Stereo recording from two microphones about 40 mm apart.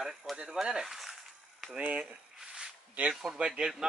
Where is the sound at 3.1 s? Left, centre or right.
Centre.